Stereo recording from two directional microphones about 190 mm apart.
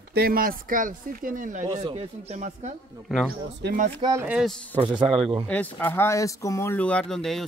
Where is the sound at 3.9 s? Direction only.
20° right (ahead or behind).